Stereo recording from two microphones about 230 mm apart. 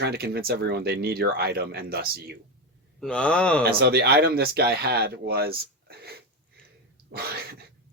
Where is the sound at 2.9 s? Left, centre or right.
Centre.